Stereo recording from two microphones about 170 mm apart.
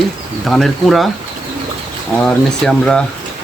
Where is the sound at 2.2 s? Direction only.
5° left (ahead or behind).